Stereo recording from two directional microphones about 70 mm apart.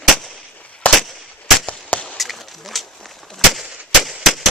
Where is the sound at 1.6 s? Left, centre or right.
Centre.